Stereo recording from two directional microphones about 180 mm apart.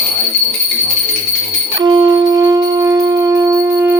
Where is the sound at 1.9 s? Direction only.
25° right (ahead or behind).